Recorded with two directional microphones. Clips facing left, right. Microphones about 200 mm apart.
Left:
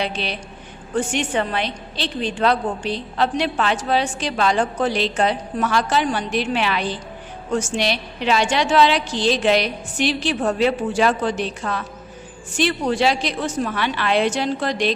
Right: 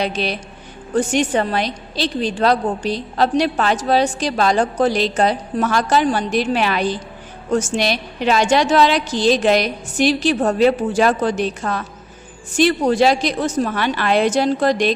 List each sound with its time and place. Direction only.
0.0 s a woman's voice: 40° right (ahead or behind)